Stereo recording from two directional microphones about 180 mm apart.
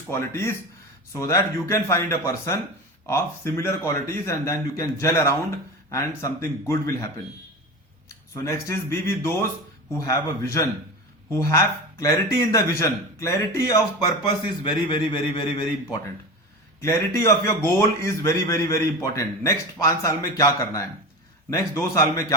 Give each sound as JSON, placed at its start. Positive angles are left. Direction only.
{"t": 0.1, "sound": "a man's voice", "side_deg": 15}
{"t": 8.4, "sound": "a man's voice", "side_deg": 15}
{"t": 16.8, "sound": "a man's voice", "side_deg": 15}